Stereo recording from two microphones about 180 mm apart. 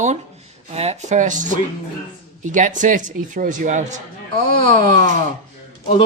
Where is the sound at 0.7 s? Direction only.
35° right (ahead or behind).